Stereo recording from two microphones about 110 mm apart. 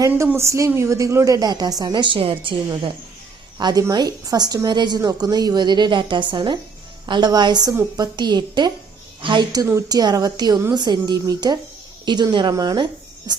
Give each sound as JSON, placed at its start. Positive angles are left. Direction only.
{"t": 0.2, "sound": "a woman's voice", "side_deg": -25}
{"t": 3.6, "sound": "a woman's voice", "side_deg": -35}